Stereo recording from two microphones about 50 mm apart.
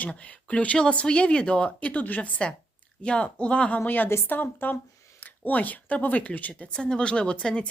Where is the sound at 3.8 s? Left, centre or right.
Left.